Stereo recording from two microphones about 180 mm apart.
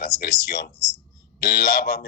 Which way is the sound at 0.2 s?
60° left (ahead or behind).